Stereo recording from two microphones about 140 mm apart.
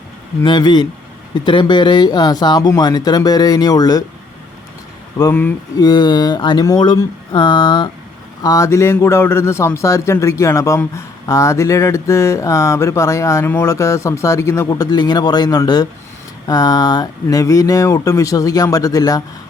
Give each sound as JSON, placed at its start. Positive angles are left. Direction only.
{"t": 0.4, "sound": "a man's voice", "side_deg": 30}
{"t": 5.1, "sound": "speech", "side_deg": 20}
{"t": 5.7, "sound": "a man's voice", "side_deg": 30}